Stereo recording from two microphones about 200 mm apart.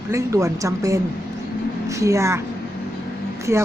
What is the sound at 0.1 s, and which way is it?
A woman's voice, 15° right (ahead or behind).